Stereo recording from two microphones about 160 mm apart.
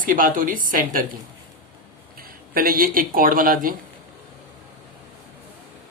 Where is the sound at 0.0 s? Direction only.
60° right (ahead or behind).